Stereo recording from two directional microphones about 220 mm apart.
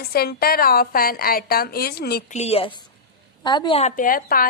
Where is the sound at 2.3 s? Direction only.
30° left (ahead or behind).